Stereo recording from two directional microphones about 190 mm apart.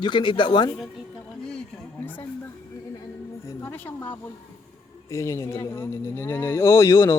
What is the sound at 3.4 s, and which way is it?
A woman's voice, 10° left (ahead or behind).